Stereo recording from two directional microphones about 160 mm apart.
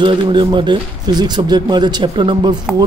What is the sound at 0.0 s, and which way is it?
Speech, 30° right (ahead or behind).